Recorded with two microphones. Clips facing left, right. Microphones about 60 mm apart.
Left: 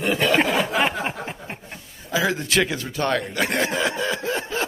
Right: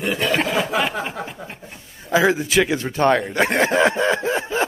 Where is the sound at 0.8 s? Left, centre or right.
Left.